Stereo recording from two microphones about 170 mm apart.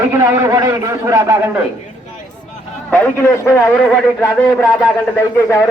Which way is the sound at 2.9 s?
10° left (ahead or behind).